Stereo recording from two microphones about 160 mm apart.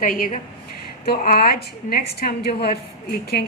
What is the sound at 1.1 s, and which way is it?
A woman's voice, 70° left (ahead or behind).